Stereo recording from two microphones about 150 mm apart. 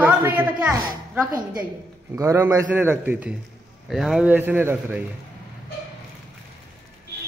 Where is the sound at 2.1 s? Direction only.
20° right (ahead or behind).